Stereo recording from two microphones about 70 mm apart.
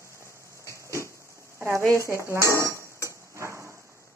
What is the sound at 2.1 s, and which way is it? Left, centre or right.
Speech, right.